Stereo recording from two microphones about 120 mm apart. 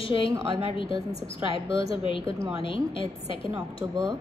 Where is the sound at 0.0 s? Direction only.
45° left (ahead or behind).